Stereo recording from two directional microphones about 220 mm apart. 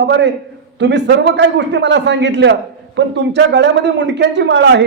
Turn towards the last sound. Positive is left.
turn(degrees=-50)  # may be behind; listen again after turning